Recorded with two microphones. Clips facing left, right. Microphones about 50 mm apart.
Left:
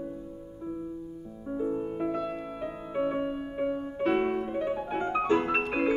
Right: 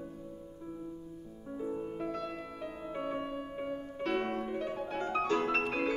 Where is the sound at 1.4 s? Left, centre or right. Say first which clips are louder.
Left 7 dB; centre.